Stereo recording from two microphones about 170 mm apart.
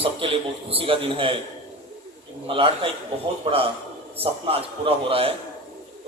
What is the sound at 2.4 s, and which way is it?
A man's voice, 30° right (ahead or behind).